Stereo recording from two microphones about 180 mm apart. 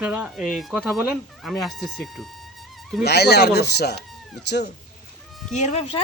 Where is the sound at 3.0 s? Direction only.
65° left (ahead or behind).